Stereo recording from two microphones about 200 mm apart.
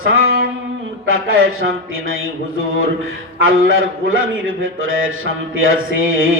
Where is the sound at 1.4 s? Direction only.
90° right.